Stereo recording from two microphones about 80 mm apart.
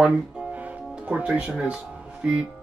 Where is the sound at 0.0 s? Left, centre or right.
Centre.